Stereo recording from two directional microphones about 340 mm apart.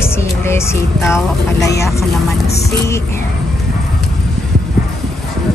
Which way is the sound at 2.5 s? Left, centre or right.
Left.